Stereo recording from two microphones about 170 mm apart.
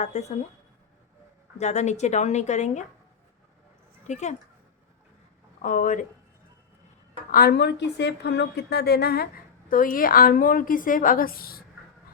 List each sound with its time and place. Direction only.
0.0 s speech: 40° left (ahead or behind)
1.5 s speech: 40° left (ahead or behind)
4.0 s speech: 45° left (ahead or behind)
5.6 s speech: 50° left (ahead or behind)
7.3 s a woman's voice: 60° left (ahead or behind)